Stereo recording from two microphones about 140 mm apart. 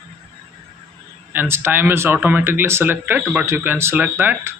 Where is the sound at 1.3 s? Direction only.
15° right (ahead or behind).